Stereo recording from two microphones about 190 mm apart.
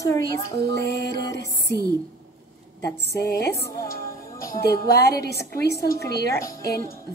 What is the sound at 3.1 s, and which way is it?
Speech, 55° left (ahead or behind).